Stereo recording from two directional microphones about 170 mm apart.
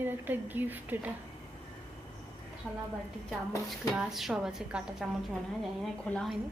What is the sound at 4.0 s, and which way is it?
A woman's voice, centre (ahead or behind).